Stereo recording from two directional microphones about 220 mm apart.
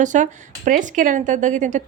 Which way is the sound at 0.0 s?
35° right (ahead or behind).